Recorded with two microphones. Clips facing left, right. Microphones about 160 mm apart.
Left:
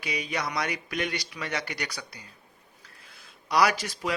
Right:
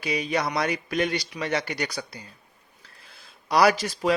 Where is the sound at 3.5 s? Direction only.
30° right (ahead or behind).